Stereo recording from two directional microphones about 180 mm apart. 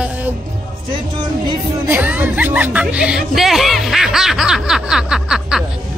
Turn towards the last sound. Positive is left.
turn(degrees=-5)  # may be behind; listen again after turning